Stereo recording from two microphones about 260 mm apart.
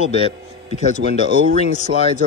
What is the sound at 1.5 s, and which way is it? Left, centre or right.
Speech, left.